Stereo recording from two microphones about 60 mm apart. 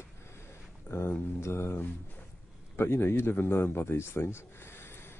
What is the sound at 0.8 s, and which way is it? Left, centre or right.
A man's voice, left.